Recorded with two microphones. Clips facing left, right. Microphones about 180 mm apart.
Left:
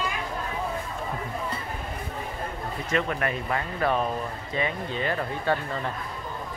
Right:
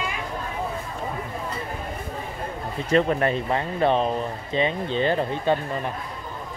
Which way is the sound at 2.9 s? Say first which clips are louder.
Right 7 dB; 30° right (ahead or behind).